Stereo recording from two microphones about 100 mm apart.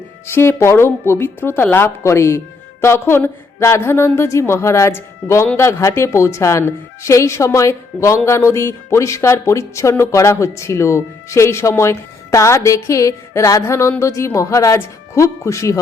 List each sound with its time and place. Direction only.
0.3 s a woman's voice: 25° left (ahead or behind)